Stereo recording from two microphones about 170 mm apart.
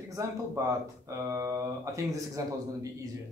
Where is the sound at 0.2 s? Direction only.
20° right (ahead or behind).